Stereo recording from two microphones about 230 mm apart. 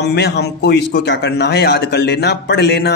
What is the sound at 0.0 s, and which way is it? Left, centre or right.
A man's voice, left.